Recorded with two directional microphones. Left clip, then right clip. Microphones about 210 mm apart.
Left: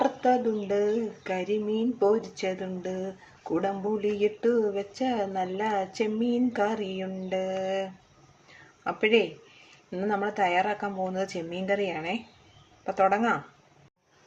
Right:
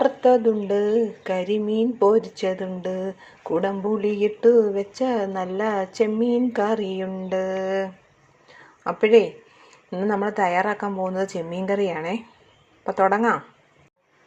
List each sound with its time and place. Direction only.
0.0 s a woman's voice: 20° right (ahead or behind)
4.4 s a woman's voice: 15° right (ahead or behind)